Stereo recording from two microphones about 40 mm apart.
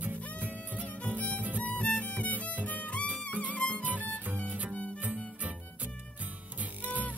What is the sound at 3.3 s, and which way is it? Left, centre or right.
Music, right.